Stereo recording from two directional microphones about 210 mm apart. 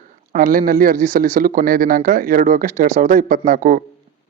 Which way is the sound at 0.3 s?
40° right (ahead or behind).